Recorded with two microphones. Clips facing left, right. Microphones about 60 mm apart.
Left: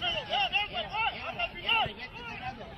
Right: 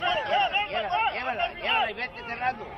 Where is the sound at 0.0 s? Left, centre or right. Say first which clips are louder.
Right 7 dB; right.